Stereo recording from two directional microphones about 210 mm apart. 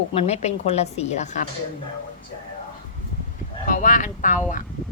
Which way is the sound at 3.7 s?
40° left (ahead or behind).